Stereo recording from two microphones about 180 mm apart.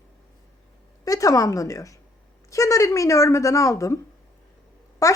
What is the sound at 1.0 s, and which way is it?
A woman's voice, 20° left (ahead or behind).